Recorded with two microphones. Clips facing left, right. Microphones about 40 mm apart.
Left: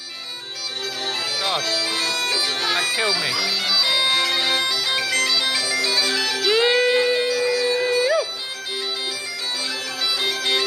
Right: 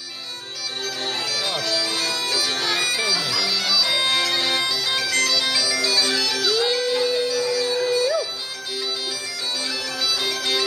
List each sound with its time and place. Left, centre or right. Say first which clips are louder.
1.5 s bagpipes: left 2 dB; left
6.4 s music: left 6 dB; left
10.0 s bagpipes: left 2 dB; centre